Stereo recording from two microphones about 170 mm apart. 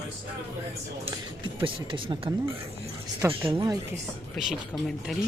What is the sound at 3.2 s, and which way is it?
Speech, 15° right (ahead or behind).